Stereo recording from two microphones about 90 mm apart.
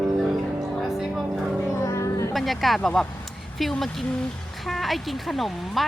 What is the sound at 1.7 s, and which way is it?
Music, 35° left (ahead or behind).